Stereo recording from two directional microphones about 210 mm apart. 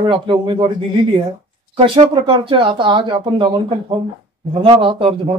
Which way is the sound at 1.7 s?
25° right (ahead or behind).